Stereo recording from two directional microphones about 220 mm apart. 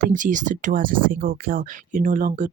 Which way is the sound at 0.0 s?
35° right (ahead or behind).